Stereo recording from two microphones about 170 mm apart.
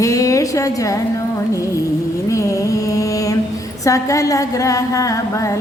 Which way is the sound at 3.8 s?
20° left (ahead or behind).